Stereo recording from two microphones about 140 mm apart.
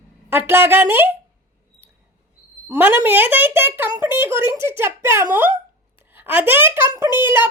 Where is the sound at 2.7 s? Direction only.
20° right (ahead or behind).